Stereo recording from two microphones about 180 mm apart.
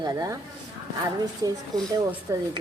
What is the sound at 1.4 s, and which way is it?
Speech, 20° right (ahead or behind).